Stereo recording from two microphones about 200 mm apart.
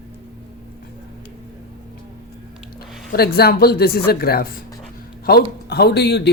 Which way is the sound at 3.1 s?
50° left (ahead or behind).